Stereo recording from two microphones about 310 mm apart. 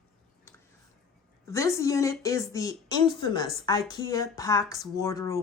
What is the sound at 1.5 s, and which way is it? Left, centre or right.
Speech, centre.